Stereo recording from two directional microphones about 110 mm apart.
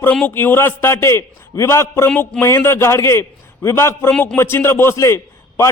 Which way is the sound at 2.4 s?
25° left (ahead or behind).